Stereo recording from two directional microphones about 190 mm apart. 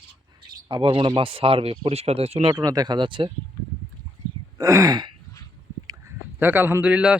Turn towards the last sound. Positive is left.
turn(degrees=-5)  # may be behind; listen again after turning